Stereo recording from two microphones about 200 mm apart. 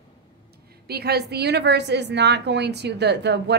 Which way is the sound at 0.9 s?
55° right (ahead or behind).